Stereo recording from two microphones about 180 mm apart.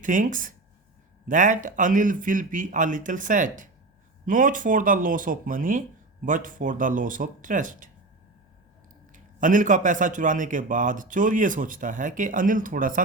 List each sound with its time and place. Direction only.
0.0 s a man's voice: 45° right (ahead or behind)
9.1 s a man's voice: 45° right (ahead or behind)